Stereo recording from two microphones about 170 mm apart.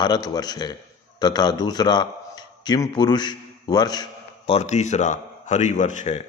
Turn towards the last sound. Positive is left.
turn(degrees=40)  # may be behind; listen again after turning